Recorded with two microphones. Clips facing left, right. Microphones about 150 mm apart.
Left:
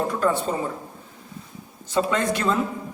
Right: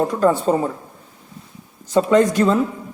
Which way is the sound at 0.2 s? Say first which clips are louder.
Right 9 dB; 40° right (ahead or behind).